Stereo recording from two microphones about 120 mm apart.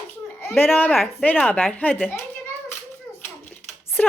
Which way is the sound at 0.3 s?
20° left (ahead or behind).